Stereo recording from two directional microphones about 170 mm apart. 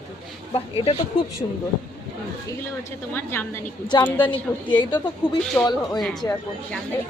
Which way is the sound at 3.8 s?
25° left (ahead or behind).